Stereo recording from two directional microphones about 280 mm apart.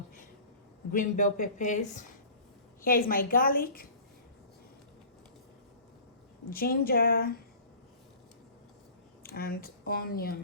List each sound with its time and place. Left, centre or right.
0.9 s a woman's voice: left
6.5 s a woman's voice: left
9.2 s speech: left